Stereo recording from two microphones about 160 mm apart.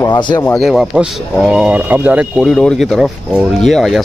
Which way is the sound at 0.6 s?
Centre (ahead or behind).